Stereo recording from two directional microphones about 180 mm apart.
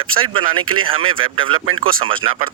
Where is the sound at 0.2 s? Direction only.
30° right (ahead or behind).